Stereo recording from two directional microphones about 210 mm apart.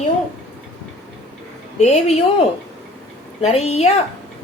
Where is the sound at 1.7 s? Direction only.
30° left (ahead or behind).